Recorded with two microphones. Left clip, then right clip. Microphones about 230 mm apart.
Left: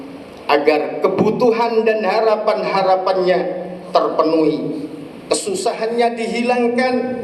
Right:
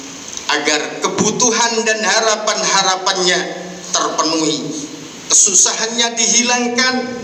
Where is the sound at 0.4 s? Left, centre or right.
Right.